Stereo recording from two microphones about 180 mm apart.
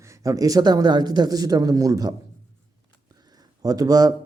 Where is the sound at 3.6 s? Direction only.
20° right (ahead or behind).